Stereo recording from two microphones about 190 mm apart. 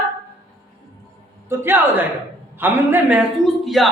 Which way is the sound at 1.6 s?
10° right (ahead or behind).